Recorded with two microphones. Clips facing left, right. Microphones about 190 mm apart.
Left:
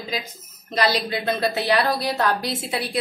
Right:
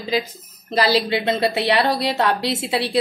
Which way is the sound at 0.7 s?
30° right (ahead or behind).